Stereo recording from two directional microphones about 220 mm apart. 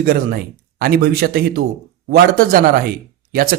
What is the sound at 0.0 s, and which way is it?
A man's voice, 40° right (ahead or behind).